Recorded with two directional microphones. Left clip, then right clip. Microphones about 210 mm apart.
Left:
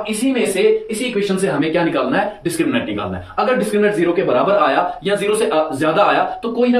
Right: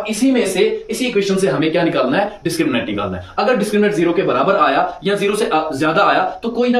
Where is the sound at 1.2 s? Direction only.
20° right (ahead or behind).